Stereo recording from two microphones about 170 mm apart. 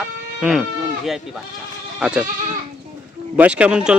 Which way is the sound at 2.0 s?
5° right (ahead or behind).